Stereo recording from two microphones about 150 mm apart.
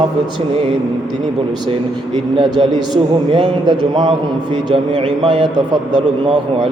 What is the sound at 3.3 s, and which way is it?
Speech, 30° right (ahead or behind).